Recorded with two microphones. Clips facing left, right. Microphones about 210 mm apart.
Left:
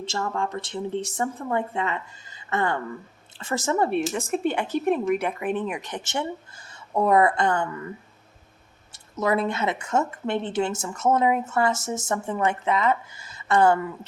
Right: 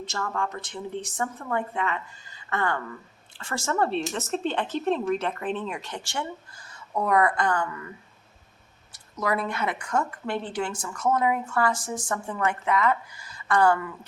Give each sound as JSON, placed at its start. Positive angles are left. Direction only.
{"t": 0.0, "sound": "speech", "side_deg": 25}
{"t": 8.9, "sound": "speech", "side_deg": 25}